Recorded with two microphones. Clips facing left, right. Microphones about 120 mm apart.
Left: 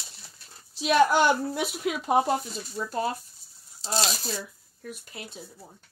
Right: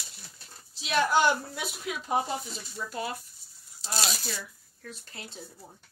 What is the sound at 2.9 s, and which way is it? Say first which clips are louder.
Speech: left 6 dB; 35° left (ahead or behind).